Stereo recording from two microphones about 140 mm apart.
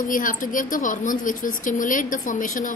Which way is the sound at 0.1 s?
70° left (ahead or behind).